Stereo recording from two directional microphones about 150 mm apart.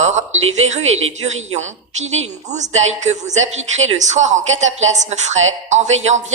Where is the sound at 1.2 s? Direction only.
50° right (ahead or behind).